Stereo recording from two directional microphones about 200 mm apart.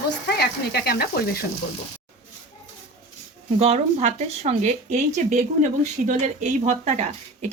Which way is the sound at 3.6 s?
30° right (ahead or behind).